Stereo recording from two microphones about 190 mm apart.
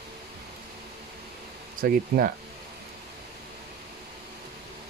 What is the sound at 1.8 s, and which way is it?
Speech, 50° right (ahead or behind).